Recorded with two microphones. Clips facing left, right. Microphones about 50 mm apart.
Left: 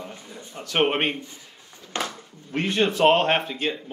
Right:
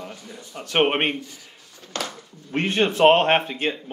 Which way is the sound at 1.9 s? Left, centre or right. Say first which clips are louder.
Left 1 dB; left.